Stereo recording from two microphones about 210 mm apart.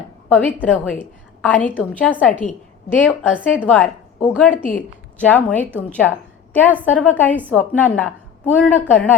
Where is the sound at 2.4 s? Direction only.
35° left (ahead or behind).